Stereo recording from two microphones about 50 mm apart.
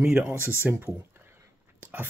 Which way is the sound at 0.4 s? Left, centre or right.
Right.